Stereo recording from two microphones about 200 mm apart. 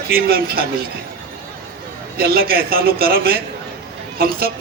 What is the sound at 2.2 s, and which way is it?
A man's voice, 50° right (ahead or behind).